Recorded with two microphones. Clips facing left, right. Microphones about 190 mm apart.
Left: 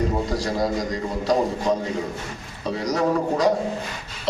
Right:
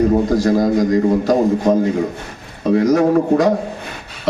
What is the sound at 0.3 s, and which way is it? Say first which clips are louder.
Speech: right 9 dB; 50° right (ahead or behind).